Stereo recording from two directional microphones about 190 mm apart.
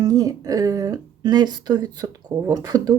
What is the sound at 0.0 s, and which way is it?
Speech, 20° right (ahead or behind).